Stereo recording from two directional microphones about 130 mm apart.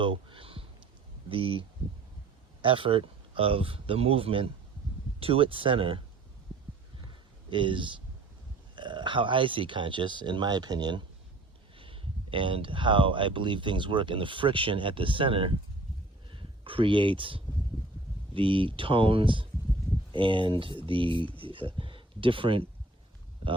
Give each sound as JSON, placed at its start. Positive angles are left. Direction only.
{"t": 0.0, "sound": "speech", "side_deg": -40}
{"t": 7.5, "sound": "speech", "side_deg": -40}